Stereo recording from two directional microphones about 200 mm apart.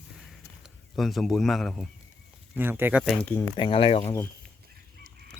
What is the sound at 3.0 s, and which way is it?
Speech, 5° left (ahead or behind).